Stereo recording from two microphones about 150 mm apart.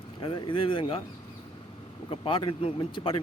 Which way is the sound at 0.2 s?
35° left (ahead or behind).